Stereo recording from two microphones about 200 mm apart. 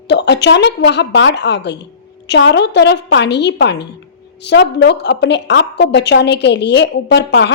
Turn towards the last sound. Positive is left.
turn(degrees=60)  # may be behind; listen again after turning